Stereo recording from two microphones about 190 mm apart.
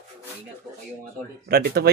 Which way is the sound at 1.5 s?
55° right (ahead or behind).